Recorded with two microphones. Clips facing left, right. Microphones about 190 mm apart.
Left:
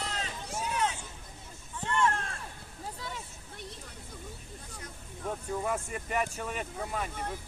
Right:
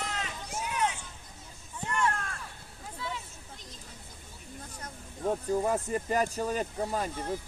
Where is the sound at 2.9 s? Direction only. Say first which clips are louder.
Right 7 dB; 40° left (ahead or behind).